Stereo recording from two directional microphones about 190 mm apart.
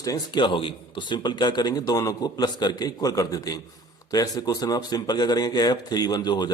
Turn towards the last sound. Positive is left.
turn(degrees=20)  # may be behind; listen again after turning